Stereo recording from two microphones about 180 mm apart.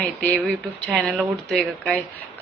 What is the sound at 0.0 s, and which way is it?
A woman's voice, 10° left (ahead or behind).